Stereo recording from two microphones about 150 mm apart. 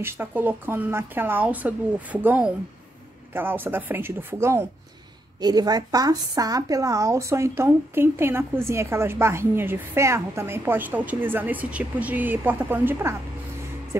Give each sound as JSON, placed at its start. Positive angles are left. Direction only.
{"t": 0.0, "sound": "speech", "side_deg": -15}